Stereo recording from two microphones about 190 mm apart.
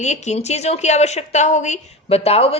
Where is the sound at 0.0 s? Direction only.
35° left (ahead or behind).